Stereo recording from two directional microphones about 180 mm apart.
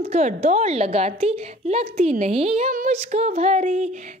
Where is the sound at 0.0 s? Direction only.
40° right (ahead or behind).